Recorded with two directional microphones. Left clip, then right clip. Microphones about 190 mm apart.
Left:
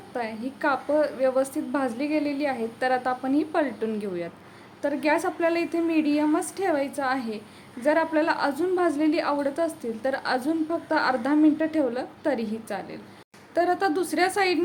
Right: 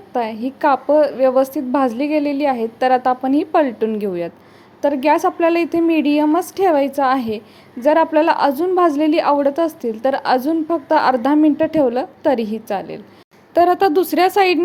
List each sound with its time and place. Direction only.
0.1 s a woman's voice: 35° right (ahead or behind)